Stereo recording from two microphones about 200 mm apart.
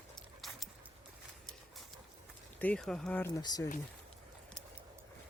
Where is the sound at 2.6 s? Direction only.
5° left (ahead or behind).